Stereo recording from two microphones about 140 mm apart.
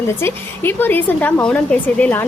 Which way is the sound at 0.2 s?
15° left (ahead or behind).